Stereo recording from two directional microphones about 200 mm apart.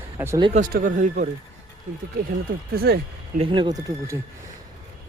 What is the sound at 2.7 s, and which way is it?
Speech, 50° right (ahead or behind).